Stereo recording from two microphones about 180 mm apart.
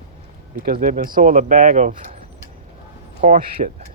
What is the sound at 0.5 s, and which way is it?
Speech, 55° right (ahead or behind).